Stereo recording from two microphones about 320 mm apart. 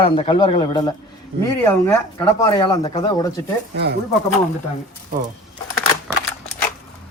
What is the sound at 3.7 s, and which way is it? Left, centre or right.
Speech, right.